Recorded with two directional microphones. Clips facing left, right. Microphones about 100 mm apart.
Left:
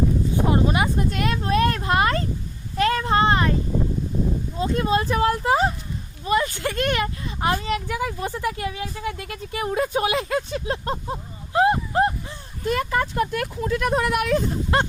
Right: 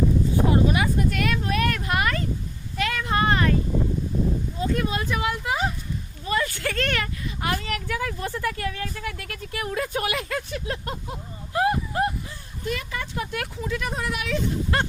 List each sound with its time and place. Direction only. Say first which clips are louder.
0.5 s vehicle: left 1 dB; 30° left (ahead or behind)
2.7 s a sound: left 5 dB; 35° left (ahead or behind)
4.5 s speech: left 7 dB; 25° left (ahead or behind)
6.2 s speech: left 4 dB; 20° left (ahead or behind)
12.6 s speech: left 8 dB; 45° left (ahead or behind)
14.7 s a sound: left 5 dB; 25° left (ahead or behind)